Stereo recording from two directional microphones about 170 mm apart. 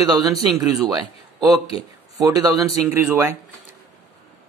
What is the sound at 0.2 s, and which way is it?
Speech, 20° right (ahead or behind).